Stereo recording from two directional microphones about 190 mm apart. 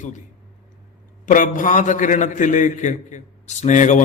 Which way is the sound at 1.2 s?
45° left (ahead or behind).